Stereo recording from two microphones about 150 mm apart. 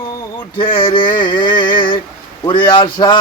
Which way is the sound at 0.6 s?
35° left (ahead or behind).